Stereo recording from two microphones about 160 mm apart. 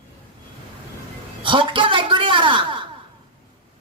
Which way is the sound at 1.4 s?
30° right (ahead or behind).